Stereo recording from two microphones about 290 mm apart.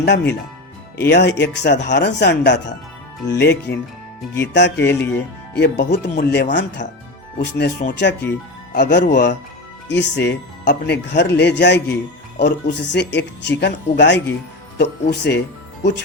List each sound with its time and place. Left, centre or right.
0.0 s speech: left